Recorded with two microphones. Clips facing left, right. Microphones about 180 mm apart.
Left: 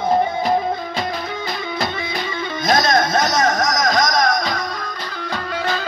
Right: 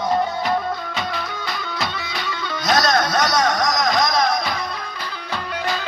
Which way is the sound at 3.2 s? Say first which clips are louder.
Left 1 dB; 45° left (ahead or behind).